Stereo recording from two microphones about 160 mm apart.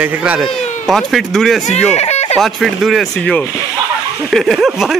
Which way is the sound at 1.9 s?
40° left (ahead or behind).